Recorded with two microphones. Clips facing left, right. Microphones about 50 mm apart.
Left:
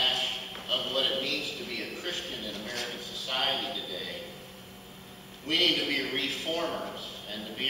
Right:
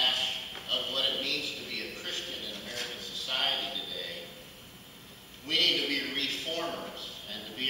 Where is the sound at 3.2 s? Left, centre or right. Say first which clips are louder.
Left 2 dB; centre.